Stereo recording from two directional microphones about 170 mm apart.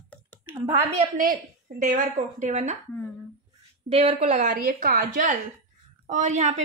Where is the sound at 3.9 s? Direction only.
35° right (ahead or behind).